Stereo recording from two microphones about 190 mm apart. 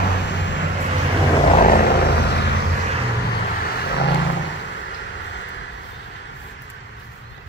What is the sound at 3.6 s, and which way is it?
Vehicle, 60° left (ahead or behind).